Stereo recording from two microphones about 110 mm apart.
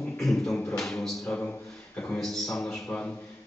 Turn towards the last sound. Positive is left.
turn(degrees=10)  # may be behind; listen again after turning